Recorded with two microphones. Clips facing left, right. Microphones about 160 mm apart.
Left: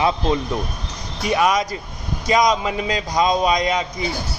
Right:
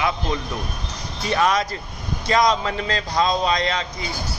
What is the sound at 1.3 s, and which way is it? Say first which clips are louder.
A man's voice: left 2 dB; 10° left (ahead or behind).